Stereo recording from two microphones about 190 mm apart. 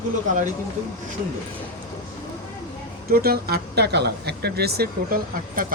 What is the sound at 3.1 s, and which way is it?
Speech, 55° right (ahead or behind).